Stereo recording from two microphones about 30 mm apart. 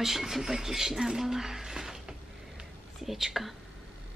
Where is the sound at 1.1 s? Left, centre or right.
Centre.